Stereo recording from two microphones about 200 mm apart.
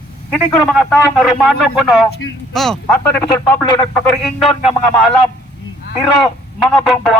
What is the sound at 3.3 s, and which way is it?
Speech, 20° left (ahead or behind).